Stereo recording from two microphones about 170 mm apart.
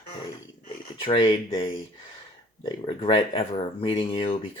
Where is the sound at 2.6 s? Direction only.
35° left (ahead or behind).